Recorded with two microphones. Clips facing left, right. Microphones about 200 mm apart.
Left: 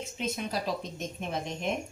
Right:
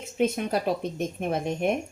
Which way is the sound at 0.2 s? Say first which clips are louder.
Right 9 dB; 55° right (ahead or behind).